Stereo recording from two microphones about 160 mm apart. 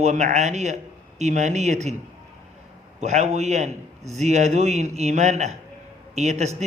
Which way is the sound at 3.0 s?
45° right (ahead or behind).